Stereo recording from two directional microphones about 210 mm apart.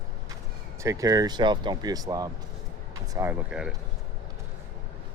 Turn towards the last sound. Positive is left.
turn(degrees=-5)  # may be behind; listen again after turning